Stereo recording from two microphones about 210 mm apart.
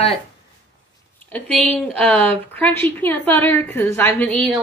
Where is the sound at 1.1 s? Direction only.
5° left (ahead or behind).